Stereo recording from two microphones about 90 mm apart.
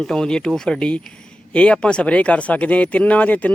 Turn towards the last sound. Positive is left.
turn(degrees=15)  # may be behind; listen again after turning